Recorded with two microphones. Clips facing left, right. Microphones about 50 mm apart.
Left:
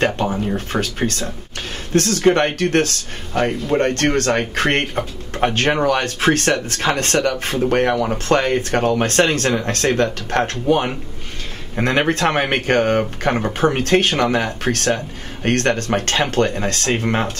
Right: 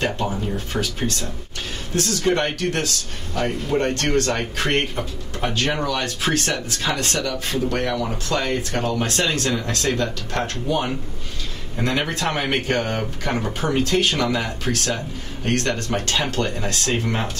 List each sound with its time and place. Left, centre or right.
0.0 s speech: left